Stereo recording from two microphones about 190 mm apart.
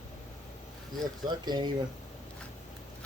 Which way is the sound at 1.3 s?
20° right (ahead or behind).